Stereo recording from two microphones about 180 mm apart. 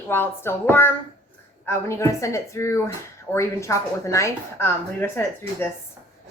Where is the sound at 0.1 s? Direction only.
10° left (ahead or behind).